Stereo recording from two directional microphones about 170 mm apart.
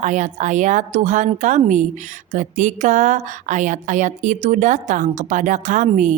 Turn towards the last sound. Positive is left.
turn(degrees=-45)  # may be behind; listen again after turning